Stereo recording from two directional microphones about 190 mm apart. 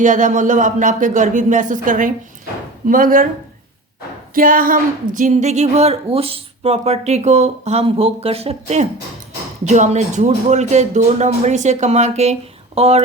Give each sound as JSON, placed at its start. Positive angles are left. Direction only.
{"t": 0.0, "sound": "speech", "side_deg": -40}
{"t": 4.4, "sound": "a woman's voice", "side_deg": -50}